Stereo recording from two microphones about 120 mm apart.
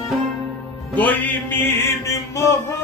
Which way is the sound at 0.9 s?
15° left (ahead or behind).